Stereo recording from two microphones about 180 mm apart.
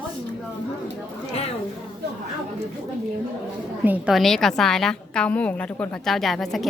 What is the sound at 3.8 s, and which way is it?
A woman's voice, 5° right (ahead or behind).